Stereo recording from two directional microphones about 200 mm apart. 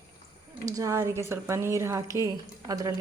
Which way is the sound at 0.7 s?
15° right (ahead or behind).